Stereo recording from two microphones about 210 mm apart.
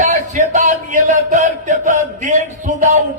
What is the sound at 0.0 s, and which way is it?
A man's voice, 35° right (ahead or behind).